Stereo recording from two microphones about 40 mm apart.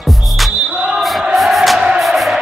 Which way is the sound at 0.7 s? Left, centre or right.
Centre.